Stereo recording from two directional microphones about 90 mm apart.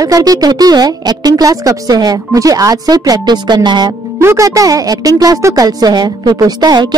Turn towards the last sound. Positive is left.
turn(degrees=-50)  # may be behind; listen again after turning